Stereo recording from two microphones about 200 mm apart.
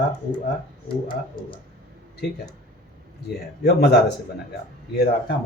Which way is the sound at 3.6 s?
55° left (ahead or behind).